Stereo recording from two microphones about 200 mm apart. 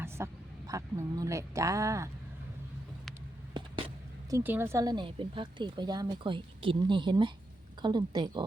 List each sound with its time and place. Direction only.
0.2 s speech: 15° right (ahead or behind)
3.6 s a sound: 25° right (ahead or behind)
4.3 s speech: 15° right (ahead or behind)